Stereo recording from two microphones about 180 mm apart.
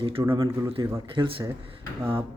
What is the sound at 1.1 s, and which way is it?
Speech, 25° right (ahead or behind).